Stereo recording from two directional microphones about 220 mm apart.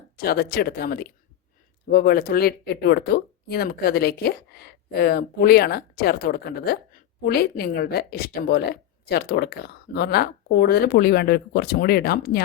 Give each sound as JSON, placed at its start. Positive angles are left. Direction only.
{"t": 0.2, "sound": "speech", "side_deg": 45}